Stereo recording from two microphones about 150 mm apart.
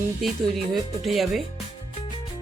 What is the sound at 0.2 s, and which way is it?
Speech, centre (ahead or behind).